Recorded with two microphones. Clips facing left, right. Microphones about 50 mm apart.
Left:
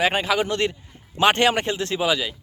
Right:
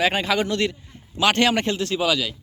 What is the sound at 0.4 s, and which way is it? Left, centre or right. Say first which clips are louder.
A man's voice: even; centre.